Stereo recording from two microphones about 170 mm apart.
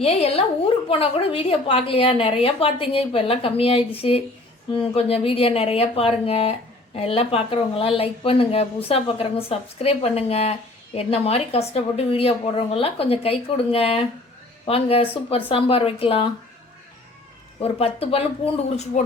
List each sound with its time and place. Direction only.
0.0 s speech: 40° left (ahead or behind)
17.6 s speech: 35° left (ahead or behind)